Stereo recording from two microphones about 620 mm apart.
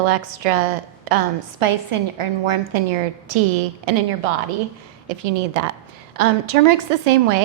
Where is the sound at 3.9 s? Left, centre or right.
Right.